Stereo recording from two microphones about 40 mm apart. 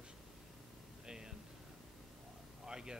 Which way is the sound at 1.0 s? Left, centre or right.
Centre.